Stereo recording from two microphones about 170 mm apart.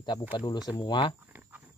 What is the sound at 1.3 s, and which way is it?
Cricket, 10° right (ahead or behind).